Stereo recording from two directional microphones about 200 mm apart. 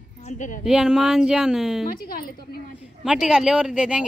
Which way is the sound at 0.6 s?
Centre (ahead or behind).